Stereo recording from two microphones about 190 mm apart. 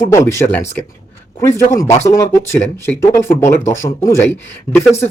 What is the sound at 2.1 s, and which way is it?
Speech, 15° left (ahead or behind).